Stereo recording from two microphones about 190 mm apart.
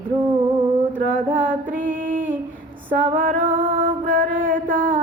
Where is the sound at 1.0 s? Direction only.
45° right (ahead or behind).